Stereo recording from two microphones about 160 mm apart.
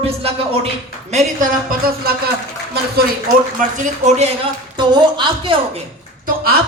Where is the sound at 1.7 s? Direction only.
70° right (ahead or behind).